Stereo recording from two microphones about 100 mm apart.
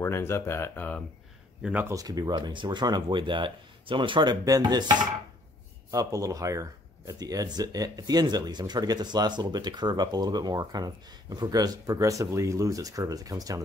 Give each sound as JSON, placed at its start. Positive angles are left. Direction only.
{"t": 0.0, "sound": "speech", "side_deg": 25}
{"t": 1.6, "sound": "speech", "side_deg": -15}
{"t": 1.9, "sound": "speech", "side_deg": -40}
{"t": 4.5, "sound": "speech", "side_deg": -45}
{"t": 5.9, "sound": "speech", "side_deg": -35}